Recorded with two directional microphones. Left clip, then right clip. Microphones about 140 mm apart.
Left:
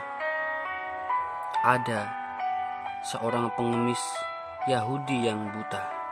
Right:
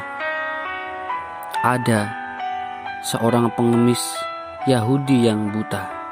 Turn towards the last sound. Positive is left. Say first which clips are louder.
# right 7 dB
turn(degrees=-35)  # may be behind; listen again after turning